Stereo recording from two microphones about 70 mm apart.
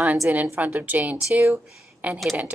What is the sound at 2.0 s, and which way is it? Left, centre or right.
Speech, right.